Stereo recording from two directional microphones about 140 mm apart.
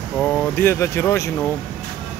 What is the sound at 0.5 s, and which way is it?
Speech, 20° left (ahead or behind).